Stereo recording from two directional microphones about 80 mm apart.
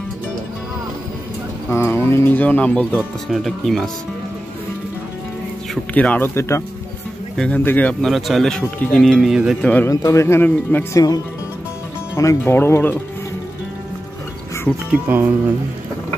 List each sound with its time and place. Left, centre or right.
1.7 s speech: left; by 3.0 s centre
3.3 s speech: centre
5.9 s speech: centre
6.2 s speech: left
7.5 s speech: left
8.0 s speech: centre
9.6 s speech: centre
9.8 s speech: left
10.4 s speech: left
10.9 s speech: left
12.2 s speech: left
12.5 s speech: left
15.0 s speech: right